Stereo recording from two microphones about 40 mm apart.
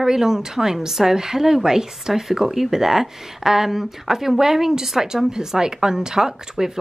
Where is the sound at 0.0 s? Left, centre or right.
Centre.